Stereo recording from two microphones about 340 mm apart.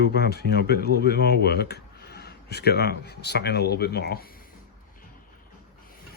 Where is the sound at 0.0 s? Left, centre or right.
Left.